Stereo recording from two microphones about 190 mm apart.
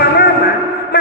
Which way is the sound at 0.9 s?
55° left (ahead or behind).